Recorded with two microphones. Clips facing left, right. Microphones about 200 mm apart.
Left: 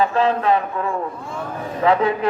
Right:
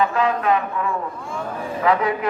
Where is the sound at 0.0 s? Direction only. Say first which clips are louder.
Left 2 dB; 30° left (ahead or behind).